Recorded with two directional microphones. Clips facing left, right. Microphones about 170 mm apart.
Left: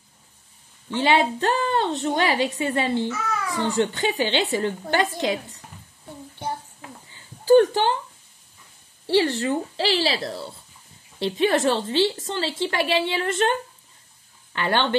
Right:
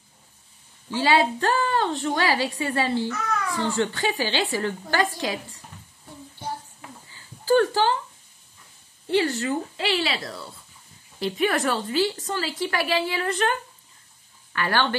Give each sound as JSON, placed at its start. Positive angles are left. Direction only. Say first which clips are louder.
{"t": 0.9, "sound": "a woman's voice", "louder": "left 1 dB", "side_deg": 20}
{"t": 7.2, "sound": "a sound", "louder": "left 5 dB", "side_deg": 20}
{"t": 9.0, "sound": "a woman's voice", "louder": "left 2 dB", "side_deg": 30}